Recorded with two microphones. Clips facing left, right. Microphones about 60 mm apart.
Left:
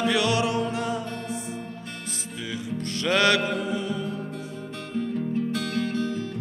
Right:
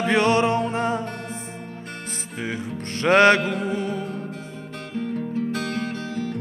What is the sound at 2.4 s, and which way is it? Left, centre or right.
Music, right.